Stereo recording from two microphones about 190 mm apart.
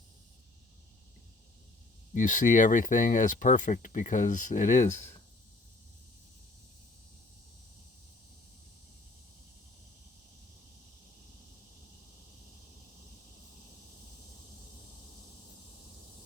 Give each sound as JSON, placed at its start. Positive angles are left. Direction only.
{"t": 2.1, "sound": "speech", "side_deg": 45}